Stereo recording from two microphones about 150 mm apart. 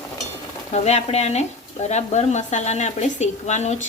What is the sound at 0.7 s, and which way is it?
A woman's voice, 45° left (ahead or behind).